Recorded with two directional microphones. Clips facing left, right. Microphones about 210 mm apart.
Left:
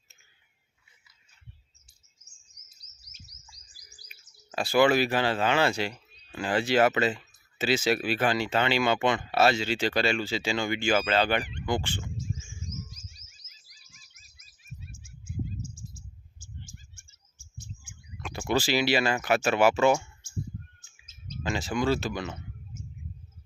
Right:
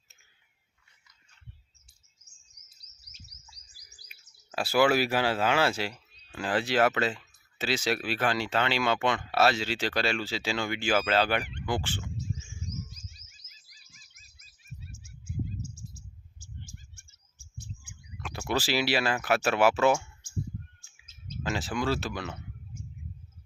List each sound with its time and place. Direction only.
2.2 s bird vocalization: 60° right (ahead or behind)
4.1 s speech: 5° right (ahead or behind)
15.0 s a sound: 40° right (ahead or behind)
18.2 s speech: centre (ahead or behind)
21.4 s speech: centre (ahead or behind)